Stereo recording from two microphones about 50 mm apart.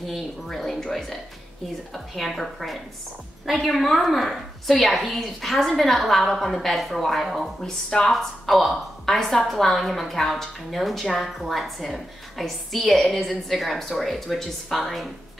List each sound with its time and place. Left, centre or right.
0.1 s a woman's voice: centre